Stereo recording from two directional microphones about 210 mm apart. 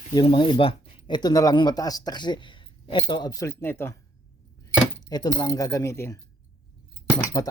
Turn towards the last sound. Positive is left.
turn(degrees=15)  # may be behind; listen again after turning